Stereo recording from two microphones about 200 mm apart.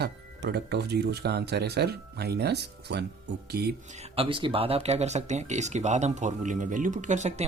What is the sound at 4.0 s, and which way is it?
Speech, 30° right (ahead or behind).